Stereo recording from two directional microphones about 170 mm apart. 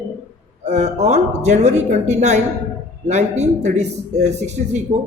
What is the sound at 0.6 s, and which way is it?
A man's voice, 40° right (ahead or behind).